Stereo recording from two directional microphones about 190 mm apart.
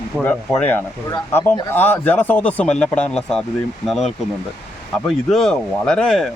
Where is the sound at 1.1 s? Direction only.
20° left (ahead or behind).